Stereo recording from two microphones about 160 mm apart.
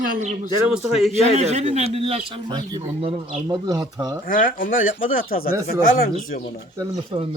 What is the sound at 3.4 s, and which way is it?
Speech, 25° right (ahead or behind).